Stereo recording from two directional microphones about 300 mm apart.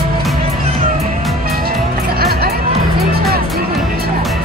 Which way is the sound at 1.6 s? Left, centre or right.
Right.